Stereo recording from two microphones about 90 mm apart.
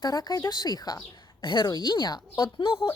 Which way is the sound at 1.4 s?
55° left (ahead or behind).